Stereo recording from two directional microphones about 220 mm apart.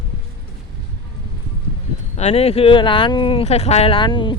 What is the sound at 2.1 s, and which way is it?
Speech, 30° left (ahead or behind).